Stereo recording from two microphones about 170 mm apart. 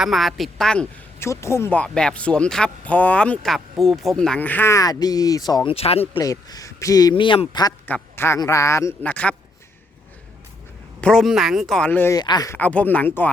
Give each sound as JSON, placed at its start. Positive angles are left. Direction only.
{"t": 0.0, "sound": "a woman's voice", "side_deg": 0}
{"t": 1.3, "sound": "speech", "side_deg": 15}
{"t": 5.7, "sound": "speech", "side_deg": 35}
{"t": 6.1, "sound": "speech", "side_deg": 20}
{"t": 7.9, "sound": "speech", "side_deg": 10}
{"t": 11.0, "sound": "a woman's voice", "side_deg": 0}
{"t": 12.1, "sound": "speech", "side_deg": 25}
{"t": 12.5, "sound": "speech", "side_deg": 10}